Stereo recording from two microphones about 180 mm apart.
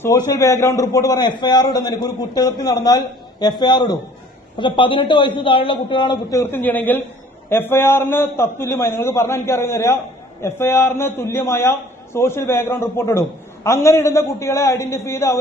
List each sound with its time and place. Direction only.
0.3 s a man's voice: 20° left (ahead or behind)
6.4 s a man's voice: 10° left (ahead or behind)